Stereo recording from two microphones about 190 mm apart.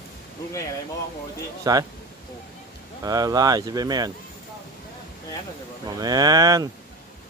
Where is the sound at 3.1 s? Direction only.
20° right (ahead or behind).